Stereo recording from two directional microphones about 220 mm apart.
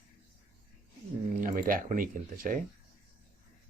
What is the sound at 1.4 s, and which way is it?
Speech, 40° right (ahead or behind).